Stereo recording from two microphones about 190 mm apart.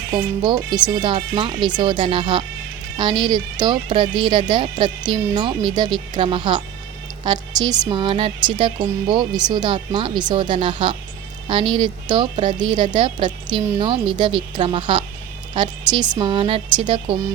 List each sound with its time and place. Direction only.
0.1 s speech: 20° right (ahead or behind)